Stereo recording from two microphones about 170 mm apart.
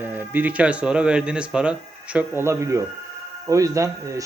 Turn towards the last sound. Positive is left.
turn(degrees=-20)  # may be behind; listen again after turning